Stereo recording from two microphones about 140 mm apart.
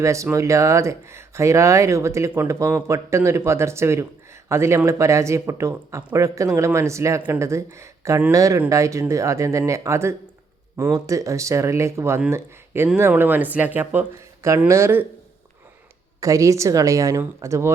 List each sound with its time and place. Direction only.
0.0 s speech: 20° right (ahead or behind)
16.2 s speech: 25° right (ahead or behind)